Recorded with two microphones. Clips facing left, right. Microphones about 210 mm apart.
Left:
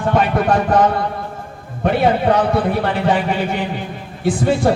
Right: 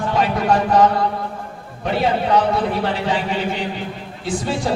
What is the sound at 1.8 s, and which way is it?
A man's voice, 55° left (ahead or behind).